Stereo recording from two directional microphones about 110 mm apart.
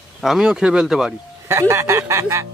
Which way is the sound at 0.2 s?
5° right (ahead or behind).